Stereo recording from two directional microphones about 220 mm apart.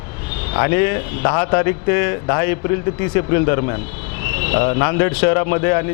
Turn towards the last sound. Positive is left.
turn(degrees=20)  # may be behind; listen again after turning